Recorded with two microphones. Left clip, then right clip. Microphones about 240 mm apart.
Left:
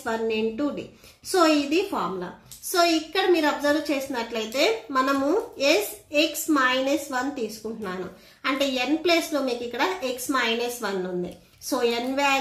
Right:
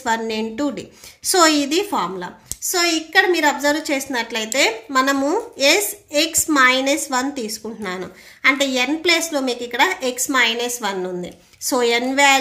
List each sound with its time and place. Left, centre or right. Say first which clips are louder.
0.0 s a woman's voice: right 4 dB; right